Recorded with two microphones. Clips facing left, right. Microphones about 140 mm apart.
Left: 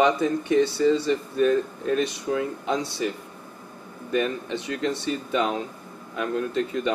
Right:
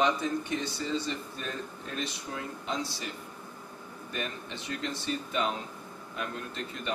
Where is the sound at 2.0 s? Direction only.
75° left (ahead or behind).